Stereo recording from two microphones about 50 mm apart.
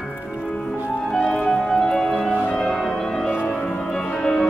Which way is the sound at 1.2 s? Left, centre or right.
Centre.